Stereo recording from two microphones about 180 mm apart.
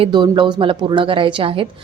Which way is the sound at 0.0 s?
25° right (ahead or behind).